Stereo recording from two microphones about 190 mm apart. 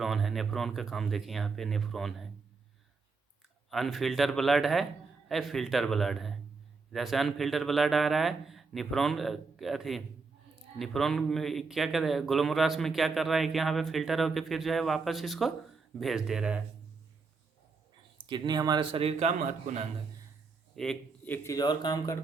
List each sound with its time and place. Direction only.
0.0 s a man's voice: centre (ahead or behind)
3.7 s a man's voice: centre (ahead or behind)
18.3 s a man's voice: 25° right (ahead or behind); by 19.8 s 40° right (ahead or behind)
20.7 s speech: 5° left (ahead or behind); by 22.2 s 20° left (ahead or behind)